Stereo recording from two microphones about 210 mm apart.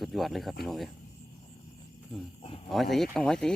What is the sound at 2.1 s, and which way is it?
Speech, centre (ahead or behind).